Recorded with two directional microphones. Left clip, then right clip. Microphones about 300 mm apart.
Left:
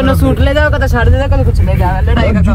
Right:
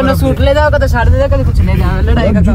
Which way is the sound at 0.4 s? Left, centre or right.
Centre.